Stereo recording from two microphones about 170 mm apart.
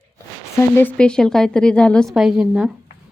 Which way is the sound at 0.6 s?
10° left (ahead or behind).